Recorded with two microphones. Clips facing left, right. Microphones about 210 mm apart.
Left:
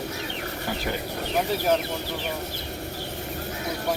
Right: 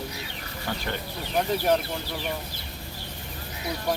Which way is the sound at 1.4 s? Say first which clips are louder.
Even; centre (ahead or behind).